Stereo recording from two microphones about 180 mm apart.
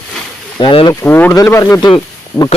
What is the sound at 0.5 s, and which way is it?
Speech, 25° left (ahead or behind).